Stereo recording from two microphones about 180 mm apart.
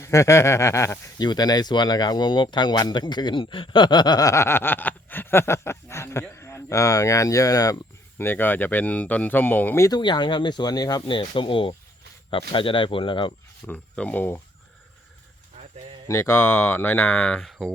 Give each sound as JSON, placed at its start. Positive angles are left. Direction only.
{"t": 0.0, "sound": "speech", "side_deg": 15}
{"t": 13.7, "sound": "speech", "side_deg": 5}
{"t": 16.0, "sound": "speech", "side_deg": 15}